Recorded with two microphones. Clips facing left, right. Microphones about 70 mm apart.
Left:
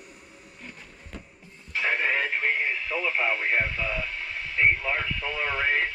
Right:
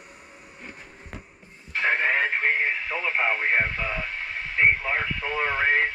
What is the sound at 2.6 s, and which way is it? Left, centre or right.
Radio, right.